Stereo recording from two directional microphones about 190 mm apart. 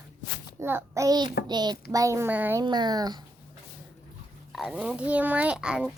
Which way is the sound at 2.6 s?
20° right (ahead or behind).